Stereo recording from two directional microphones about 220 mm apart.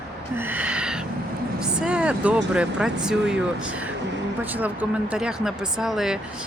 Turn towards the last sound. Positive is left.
turn(degrees=-5)  # may be behind; listen again after turning